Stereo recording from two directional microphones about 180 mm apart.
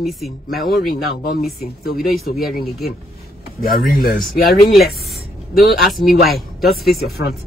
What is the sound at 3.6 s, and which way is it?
Speech, 55° left (ahead or behind).